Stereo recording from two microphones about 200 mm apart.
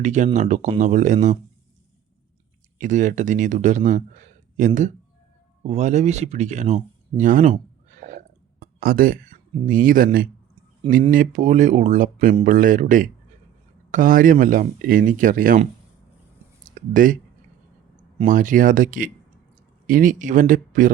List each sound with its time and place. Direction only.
0.0 s speech: 35° right (ahead or behind)
2.7 s speech: 40° right (ahead or behind)
16.6 s speech: 40° right (ahead or behind)
18.3 s speech: 40° right (ahead or behind)